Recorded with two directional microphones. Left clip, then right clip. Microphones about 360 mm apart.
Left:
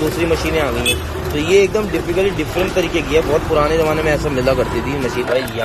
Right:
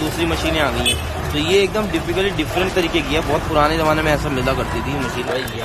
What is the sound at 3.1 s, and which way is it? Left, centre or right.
Speech, centre.